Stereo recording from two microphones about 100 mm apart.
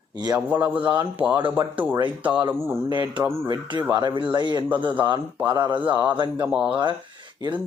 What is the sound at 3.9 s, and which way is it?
Speech, 50° right (ahead or behind).